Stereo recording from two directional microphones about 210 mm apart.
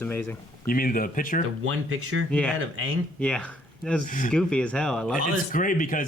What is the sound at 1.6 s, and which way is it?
Speech, 80° right.